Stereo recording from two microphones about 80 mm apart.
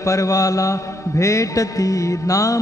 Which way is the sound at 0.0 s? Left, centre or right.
Left.